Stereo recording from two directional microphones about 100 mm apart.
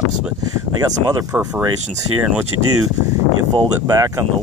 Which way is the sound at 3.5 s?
35° right (ahead or behind).